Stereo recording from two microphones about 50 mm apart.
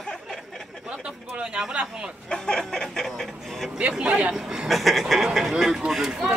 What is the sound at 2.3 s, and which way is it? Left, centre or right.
Chicken, centre.